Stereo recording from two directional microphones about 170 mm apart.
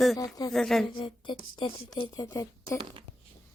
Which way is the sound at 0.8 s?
30° left (ahead or behind).